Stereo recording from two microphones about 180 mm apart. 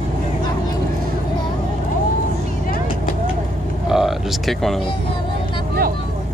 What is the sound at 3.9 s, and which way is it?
Speech, centre (ahead or behind).